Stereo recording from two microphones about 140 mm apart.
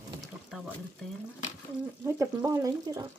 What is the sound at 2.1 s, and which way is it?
Speech, 25° right (ahead or behind).